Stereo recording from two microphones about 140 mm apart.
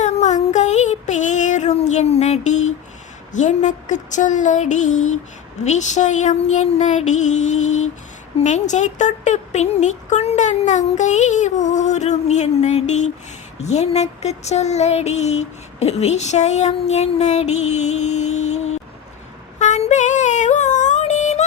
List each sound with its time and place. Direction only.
0.0 s child singing: 55° left (ahead or behind)
3.3 s speech: 60° left (ahead or behind)
13.6 s child singing: 50° left (ahead or behind)
19.5 s music: 55° left (ahead or behind)